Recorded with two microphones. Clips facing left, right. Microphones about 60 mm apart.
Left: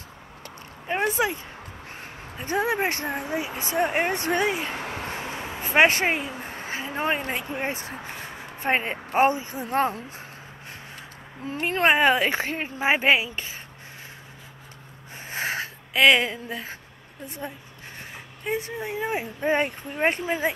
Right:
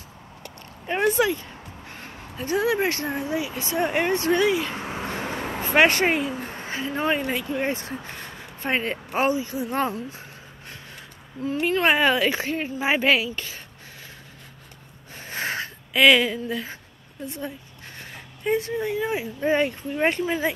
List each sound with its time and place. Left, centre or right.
0.8 s speech: centre
1.2 s a woman's voice: left
2.0 s a sound: left
2.5 s speech: left
5.7 s a woman's voice: centre
9.3 s speech: left
11.4 s a woman's voice: left
15.1 s a sound: centre
16.2 s a woman's voice: left
18.1 s a woman's voice: centre